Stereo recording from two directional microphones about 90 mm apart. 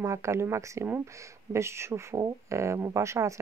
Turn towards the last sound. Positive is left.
turn(degrees=-35)  # may be behind; listen again after turning